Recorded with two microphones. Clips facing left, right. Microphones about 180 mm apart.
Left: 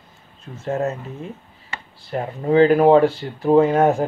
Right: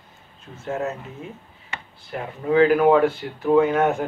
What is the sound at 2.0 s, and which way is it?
Speech, 35° left (ahead or behind).